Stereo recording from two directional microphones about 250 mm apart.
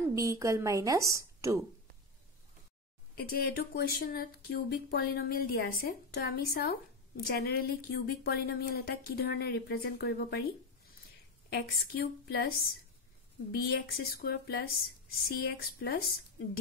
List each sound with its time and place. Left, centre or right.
0.1 s a woman's voice: centre
3.2 s speech: left
11.5 s speech: left